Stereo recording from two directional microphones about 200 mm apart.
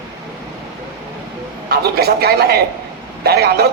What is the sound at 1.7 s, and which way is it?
A man's voice, 50° right (ahead or behind).